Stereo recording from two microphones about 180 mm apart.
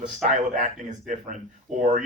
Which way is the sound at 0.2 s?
45° right (ahead or behind).